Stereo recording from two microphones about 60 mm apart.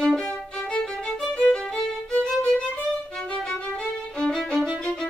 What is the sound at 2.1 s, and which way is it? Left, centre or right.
Music, left.